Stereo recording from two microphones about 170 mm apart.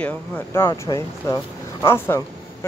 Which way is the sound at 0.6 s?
20° left (ahead or behind).